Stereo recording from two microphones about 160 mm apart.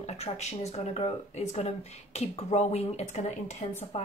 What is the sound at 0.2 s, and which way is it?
Speech, 45° left (ahead or behind).